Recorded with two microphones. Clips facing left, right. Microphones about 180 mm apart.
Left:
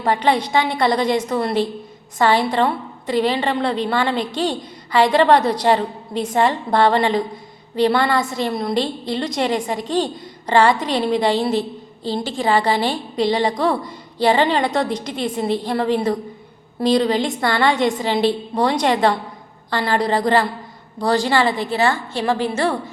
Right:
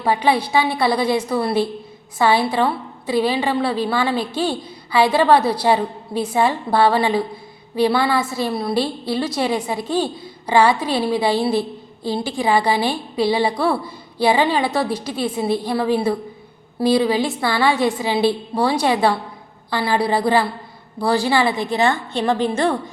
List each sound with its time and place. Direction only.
0.0 s a woman's voice: 10° right (ahead or behind)